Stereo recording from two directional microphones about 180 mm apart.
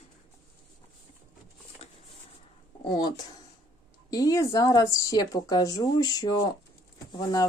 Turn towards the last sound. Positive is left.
turn(degrees=20)  # may be behind; listen again after turning